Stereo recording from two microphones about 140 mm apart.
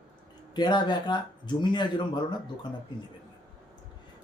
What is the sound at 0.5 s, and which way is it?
Speech, 30° left (ahead or behind).